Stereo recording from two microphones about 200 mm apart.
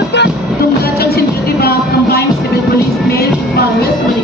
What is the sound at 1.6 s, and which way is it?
Music, 50° left (ahead or behind).